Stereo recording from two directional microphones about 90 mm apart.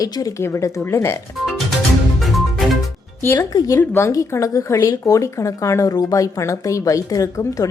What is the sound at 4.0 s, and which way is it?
Speech, 30° left (ahead or behind).